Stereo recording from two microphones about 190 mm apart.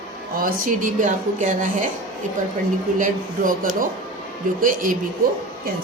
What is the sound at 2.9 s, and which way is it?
Speech, 45° right (ahead or behind).